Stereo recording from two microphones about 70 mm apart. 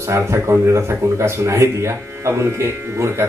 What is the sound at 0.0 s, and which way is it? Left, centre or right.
A man's voice, right.